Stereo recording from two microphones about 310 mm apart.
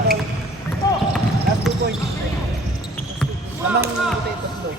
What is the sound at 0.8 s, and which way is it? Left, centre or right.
Basketball bounce, centre.